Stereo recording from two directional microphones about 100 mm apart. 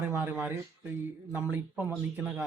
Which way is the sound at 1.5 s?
15° right (ahead or behind).